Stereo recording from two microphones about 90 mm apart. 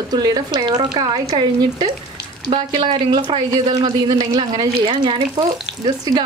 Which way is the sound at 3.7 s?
55° right (ahead or behind).